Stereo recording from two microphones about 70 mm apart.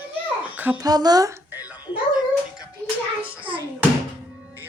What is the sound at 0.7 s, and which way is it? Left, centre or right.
Speech, right.